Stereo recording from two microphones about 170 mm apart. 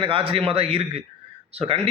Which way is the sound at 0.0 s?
30° right (ahead or behind).